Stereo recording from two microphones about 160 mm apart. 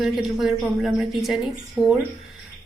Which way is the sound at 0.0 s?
Centre (ahead or behind).